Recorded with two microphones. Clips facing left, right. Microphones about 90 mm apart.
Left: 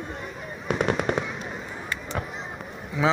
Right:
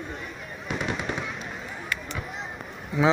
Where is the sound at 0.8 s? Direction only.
50° left (ahead or behind).